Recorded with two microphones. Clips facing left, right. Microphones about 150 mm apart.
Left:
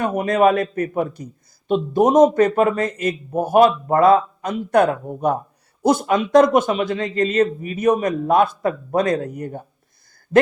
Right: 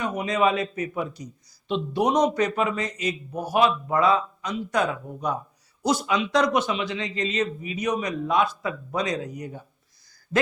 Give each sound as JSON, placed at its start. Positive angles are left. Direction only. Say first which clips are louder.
{"t": 0.0, "sound": "a man's voice", "louder": "left 7 dB", "side_deg": 55}